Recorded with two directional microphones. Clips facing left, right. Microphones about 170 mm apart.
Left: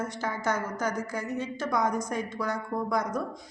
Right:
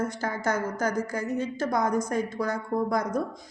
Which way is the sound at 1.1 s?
40° right (ahead or behind).